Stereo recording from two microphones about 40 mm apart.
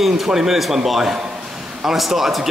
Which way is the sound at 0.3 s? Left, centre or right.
Centre.